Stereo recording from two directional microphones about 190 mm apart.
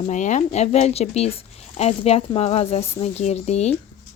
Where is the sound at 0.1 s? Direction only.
40° left (ahead or behind).